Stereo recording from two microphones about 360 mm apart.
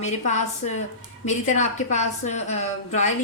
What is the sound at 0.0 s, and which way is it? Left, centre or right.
A woman's voice, centre.